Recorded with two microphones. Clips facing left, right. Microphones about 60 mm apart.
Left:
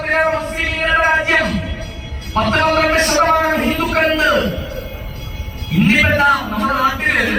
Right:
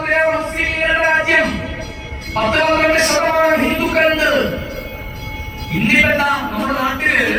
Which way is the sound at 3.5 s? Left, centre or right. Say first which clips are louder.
Right 2 dB; right.